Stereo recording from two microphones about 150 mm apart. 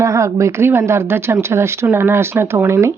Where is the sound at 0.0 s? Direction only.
20° right (ahead or behind).